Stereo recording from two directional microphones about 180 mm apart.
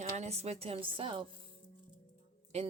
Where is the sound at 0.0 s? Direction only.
35° right (ahead or behind).